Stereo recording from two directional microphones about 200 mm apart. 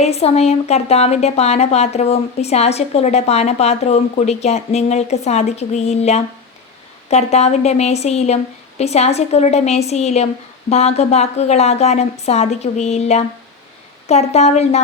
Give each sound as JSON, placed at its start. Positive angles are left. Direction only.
{"t": 0.0, "sound": "a woman's voice", "side_deg": 30}